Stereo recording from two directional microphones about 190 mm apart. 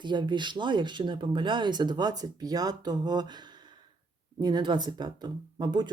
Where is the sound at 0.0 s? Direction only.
25° right (ahead or behind).